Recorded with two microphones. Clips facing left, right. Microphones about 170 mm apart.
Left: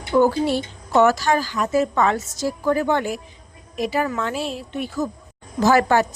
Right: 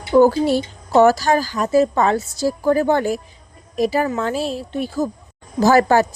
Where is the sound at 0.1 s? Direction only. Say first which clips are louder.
Right 4 dB; 40° right (ahead or behind).